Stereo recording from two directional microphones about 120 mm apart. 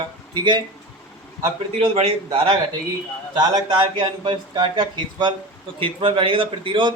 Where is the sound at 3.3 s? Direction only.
40° right (ahead or behind).